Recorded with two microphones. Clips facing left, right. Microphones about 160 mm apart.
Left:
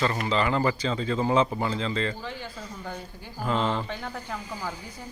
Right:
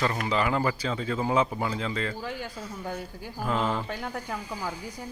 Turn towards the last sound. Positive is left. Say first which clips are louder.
# right 1 dB
turn(degrees=-10)  # may be behind; listen again after turning